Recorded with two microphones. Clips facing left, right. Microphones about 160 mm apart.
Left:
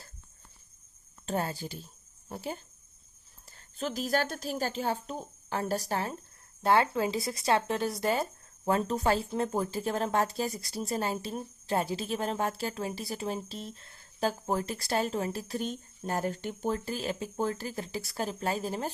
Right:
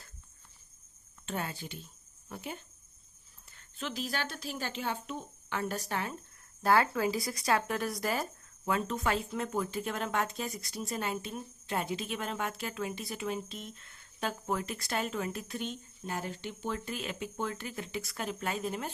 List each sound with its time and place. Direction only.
1.2 s speech: 40° left (ahead or behind)
3.8 s a woman's voice: 40° left (ahead or behind)
6.6 s speech: 25° left (ahead or behind)